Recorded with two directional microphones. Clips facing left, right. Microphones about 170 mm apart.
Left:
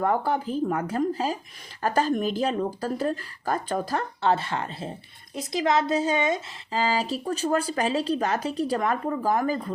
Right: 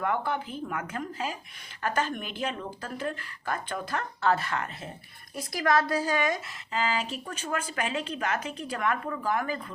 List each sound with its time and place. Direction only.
0.0 s speech: 35° left (ahead or behind)